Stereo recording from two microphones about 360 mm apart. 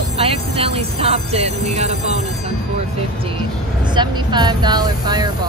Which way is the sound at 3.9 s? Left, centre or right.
Centre.